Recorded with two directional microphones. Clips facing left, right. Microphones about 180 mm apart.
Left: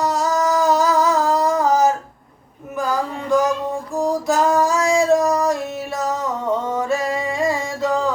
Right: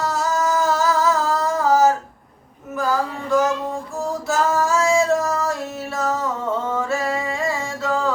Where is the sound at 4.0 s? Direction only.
15° left (ahead or behind).